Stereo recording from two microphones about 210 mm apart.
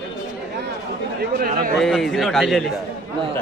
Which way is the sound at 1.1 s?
45° right (ahead or behind).